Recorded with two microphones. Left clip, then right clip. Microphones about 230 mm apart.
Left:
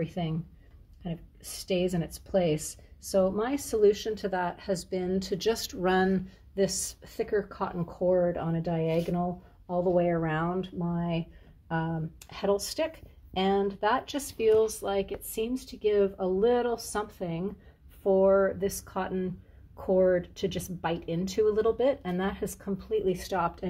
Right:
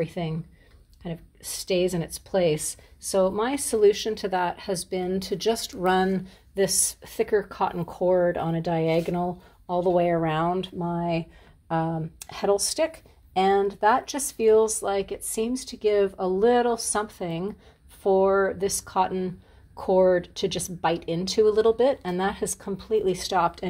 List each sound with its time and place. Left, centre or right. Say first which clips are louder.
0.0 s a woman's voice: right 5 dB; right